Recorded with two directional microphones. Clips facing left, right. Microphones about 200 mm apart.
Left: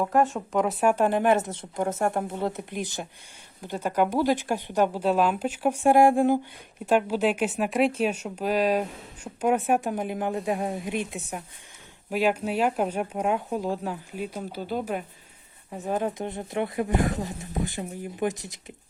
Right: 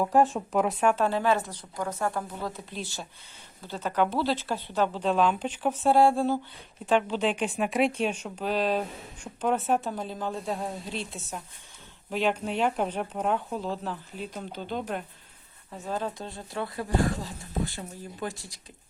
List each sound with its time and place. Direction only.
0.0 s a woman's voice: 5° right (ahead or behind)
15.7 s speech: 20° left (ahead or behind)